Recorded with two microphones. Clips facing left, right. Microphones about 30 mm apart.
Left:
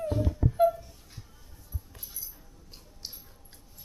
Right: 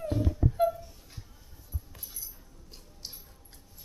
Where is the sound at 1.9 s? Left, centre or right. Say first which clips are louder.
Even; centre.